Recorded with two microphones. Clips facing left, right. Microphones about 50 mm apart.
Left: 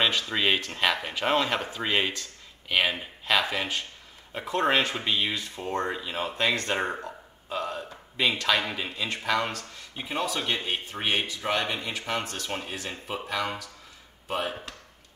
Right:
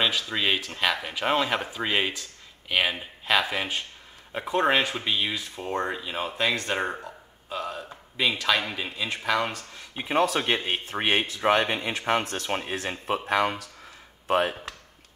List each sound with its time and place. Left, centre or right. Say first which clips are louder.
0.0 s speech: even; centre
9.5 s speech: even; centre
14.2 s speech: right 7 dB; right